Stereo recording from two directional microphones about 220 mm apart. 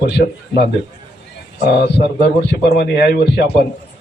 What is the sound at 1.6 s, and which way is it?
A man's voice, 45° left (ahead or behind).